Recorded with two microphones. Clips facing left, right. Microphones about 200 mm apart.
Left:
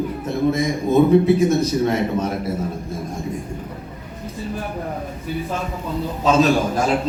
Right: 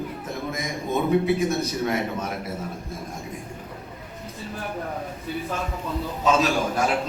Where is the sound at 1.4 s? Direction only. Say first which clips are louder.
Left 7 dB; 30° left (ahead or behind).